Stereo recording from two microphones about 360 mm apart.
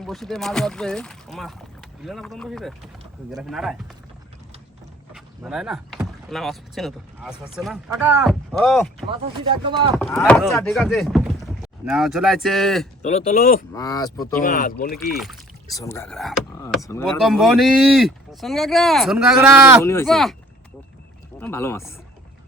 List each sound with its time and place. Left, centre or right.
0.0 s speech: centre
5.1 s speech: centre
9.6 s speech: centre
10.0 s speech: centre
13.0 s speech: centre
13.7 s speech: centre
14.3 s speech: left
14.9 s speech: centre
19.8 s speech: centre
21.3 s speech: centre